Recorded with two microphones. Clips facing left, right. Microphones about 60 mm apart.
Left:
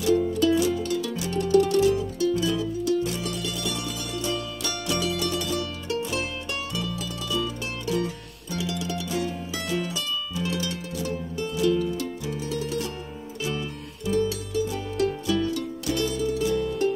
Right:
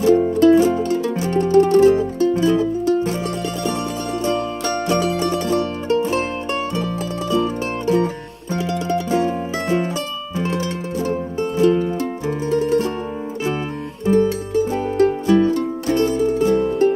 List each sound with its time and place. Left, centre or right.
0.0 s music: right
4.2 s music: right
14.0 s music: right